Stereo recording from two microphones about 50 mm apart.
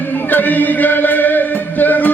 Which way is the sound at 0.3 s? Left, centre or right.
Left.